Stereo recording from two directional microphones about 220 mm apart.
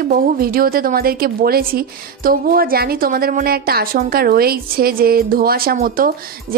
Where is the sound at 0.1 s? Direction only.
40° right (ahead or behind).